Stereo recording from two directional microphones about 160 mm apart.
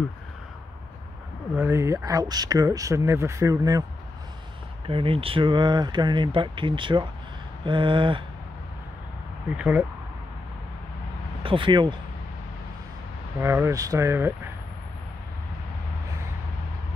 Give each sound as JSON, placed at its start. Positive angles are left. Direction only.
{"t": 1.5, "sound": "speech", "side_deg": -15}
{"t": 4.8, "sound": "speech", "side_deg": -35}
{"t": 9.6, "sound": "speech", "side_deg": -10}
{"t": 11.4, "sound": "speech", "side_deg": -30}
{"t": 13.4, "sound": "speech", "side_deg": -15}